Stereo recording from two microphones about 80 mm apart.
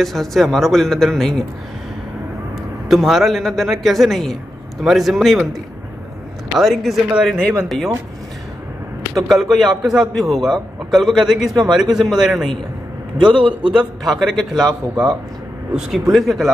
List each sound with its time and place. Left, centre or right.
0.0 s a man's voice: centre
2.9 s a man's voice: centre
6.6 s a man's voice: centre
9.3 s a man's voice: centre
13.2 s a man's voice: right
13.7 s a man's voice: centre